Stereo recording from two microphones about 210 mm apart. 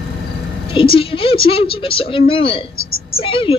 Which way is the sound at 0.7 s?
25° left (ahead or behind).